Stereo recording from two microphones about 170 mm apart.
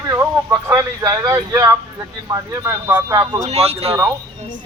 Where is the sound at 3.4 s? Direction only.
35° right (ahead or behind).